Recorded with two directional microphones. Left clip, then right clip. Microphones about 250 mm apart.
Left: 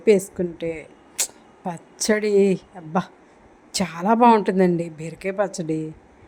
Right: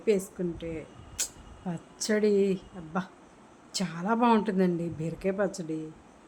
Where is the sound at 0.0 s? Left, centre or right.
Left.